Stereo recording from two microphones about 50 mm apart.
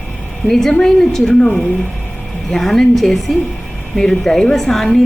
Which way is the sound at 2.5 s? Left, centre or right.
Centre.